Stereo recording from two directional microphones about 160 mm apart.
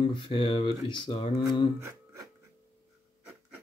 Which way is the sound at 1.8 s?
15° right (ahead or behind).